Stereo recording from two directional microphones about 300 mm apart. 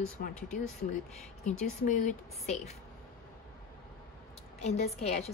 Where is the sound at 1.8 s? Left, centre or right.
Left.